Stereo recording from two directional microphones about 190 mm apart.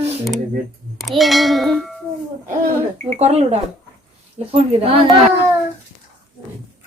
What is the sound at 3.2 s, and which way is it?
Speech, 35° right (ahead or behind).